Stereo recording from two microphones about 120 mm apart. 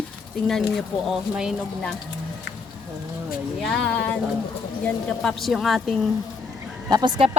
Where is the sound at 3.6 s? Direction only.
10° left (ahead or behind).